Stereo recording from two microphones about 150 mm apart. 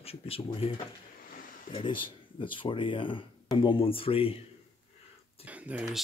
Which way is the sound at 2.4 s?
35° left (ahead or behind).